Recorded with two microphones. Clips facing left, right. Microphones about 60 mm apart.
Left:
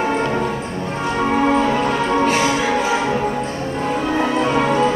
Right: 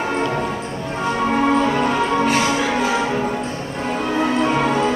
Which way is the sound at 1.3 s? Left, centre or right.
Centre.